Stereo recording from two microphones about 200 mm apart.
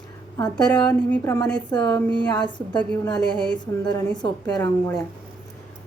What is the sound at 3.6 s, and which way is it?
A woman's voice, 20° left (ahead or behind).